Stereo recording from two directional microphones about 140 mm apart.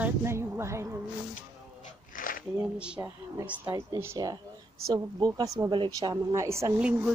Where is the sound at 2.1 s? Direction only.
85° left.